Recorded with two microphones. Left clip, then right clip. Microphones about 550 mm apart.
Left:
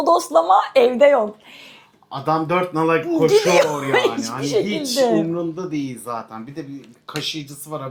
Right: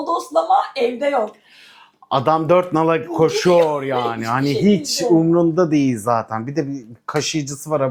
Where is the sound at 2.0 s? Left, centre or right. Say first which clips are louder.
Right 5 dB; right.